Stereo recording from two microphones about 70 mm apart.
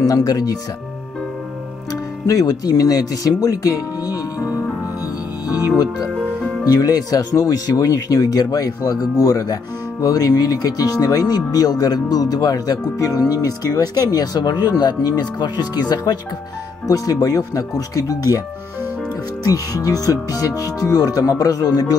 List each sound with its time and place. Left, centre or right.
0.0 s speech: left
2.2 s speech: left
6.6 s speech: left
16.8 s speech: left
19.4 s speech: left